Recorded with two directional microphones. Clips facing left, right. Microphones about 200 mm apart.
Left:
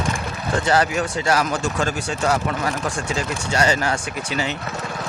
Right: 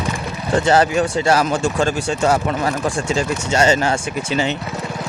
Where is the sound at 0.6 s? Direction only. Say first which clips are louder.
Right 4 dB; 25° right (ahead or behind).